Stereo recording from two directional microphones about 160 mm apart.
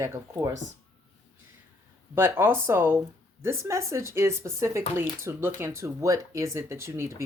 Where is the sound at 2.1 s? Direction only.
15° right (ahead or behind).